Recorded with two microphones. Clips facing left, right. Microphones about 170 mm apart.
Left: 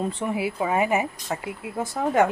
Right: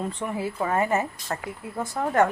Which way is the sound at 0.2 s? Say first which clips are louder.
Left 2 dB; 10° left (ahead or behind).